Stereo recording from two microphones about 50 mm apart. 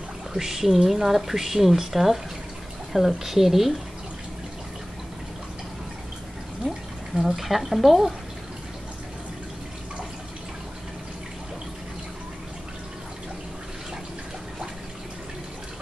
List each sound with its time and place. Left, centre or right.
0.3 s speech: centre
6.6 s a sound: centre
7.2 s speech: centre